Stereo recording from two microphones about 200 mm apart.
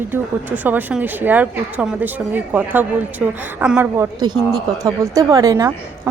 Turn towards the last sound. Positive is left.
turn(degrees=-15)  # may be behind; listen again after turning